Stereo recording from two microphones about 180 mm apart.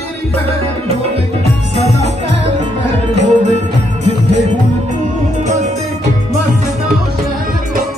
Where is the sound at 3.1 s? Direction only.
40° right (ahead or behind).